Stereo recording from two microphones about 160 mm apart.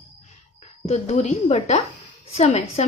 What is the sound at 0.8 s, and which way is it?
A woman's voice, 45° left (ahead or behind).